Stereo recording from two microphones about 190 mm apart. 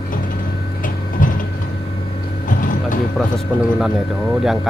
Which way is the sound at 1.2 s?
45° left (ahead or behind).